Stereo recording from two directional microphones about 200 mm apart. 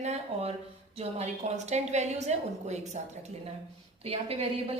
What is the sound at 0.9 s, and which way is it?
A woman's voice, 35° right (ahead or behind).